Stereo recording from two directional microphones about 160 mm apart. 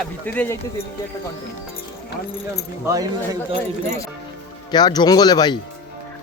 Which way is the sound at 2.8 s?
20° right (ahead or behind).